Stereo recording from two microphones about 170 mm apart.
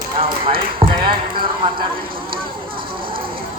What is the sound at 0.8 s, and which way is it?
Clip-clop, 30° right (ahead or behind).